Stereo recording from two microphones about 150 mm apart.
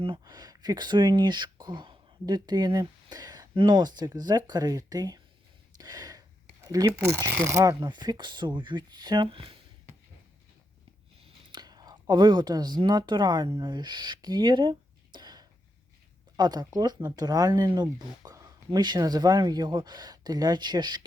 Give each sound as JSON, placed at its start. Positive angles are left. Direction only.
{"t": 0.0, "sound": "speech", "side_deg": -30}
{"t": 5.7, "sound": "a sound", "side_deg": -25}
{"t": 7.1, "sound": "speech", "side_deg": -20}
{"t": 11.2, "sound": "speech", "side_deg": -30}